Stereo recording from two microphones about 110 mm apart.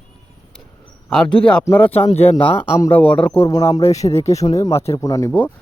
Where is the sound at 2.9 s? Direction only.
15° left (ahead or behind).